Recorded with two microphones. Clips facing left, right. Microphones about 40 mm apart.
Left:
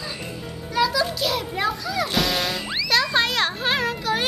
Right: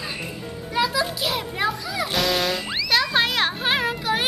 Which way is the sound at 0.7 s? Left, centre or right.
Centre.